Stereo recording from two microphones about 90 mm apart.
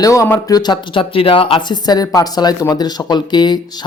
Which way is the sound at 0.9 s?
90° left.